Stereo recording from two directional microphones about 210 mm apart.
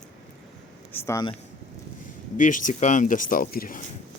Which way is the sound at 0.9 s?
15° left (ahead or behind).